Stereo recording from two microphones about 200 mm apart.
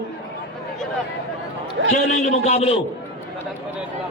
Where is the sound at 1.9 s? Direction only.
35° left (ahead or behind).